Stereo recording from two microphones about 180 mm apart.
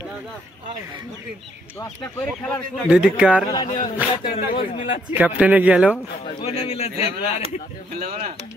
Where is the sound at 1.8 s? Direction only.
15° left (ahead or behind).